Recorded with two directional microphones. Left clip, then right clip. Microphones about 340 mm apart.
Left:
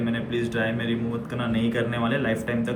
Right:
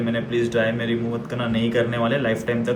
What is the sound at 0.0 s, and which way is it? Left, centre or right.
A man's voice, centre.